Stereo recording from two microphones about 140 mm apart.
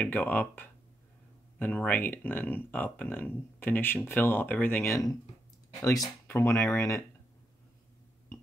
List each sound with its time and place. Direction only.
0.0 s speech: 10° left (ahead or behind)